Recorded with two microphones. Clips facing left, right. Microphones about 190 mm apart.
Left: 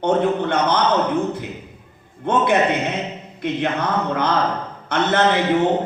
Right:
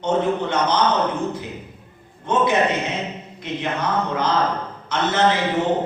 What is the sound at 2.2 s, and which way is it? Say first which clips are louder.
Mantra: left 1 dB; 60° left (ahead or behind).